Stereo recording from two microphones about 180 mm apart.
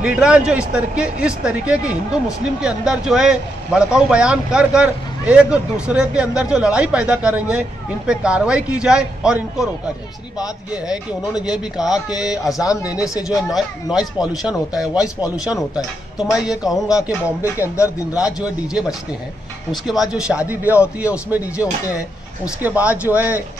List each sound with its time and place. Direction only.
0.0 s speech: 5° right (ahead or behind)
10.7 s speech: 5° right (ahead or behind)
12.9 s speech: 20° left (ahead or behind)
13.3 s speech: centre (ahead or behind)
19.9 s speech: 5° right (ahead or behind)